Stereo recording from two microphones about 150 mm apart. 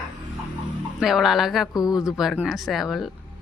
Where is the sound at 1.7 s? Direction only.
25° left (ahead or behind).